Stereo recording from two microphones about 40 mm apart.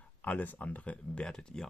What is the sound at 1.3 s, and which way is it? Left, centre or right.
Speech, centre.